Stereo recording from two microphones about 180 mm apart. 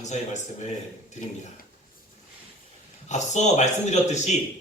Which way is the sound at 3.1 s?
40° left (ahead or behind).